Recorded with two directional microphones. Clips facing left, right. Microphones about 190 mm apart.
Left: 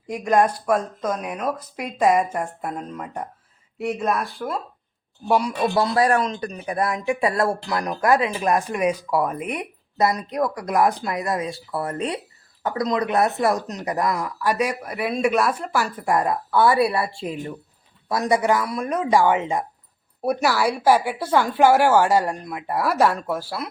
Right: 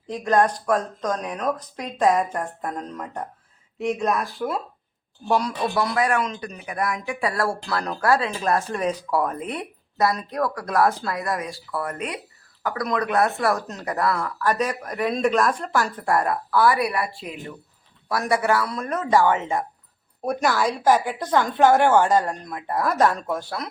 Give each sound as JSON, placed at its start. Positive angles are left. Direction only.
{"t": 0.1, "sound": "speech", "side_deg": 10}
{"t": 5.3, "sound": "speech", "side_deg": 10}
{"t": 5.7, "sound": "speech", "side_deg": 30}
{"t": 18.1, "sound": "speech", "side_deg": 20}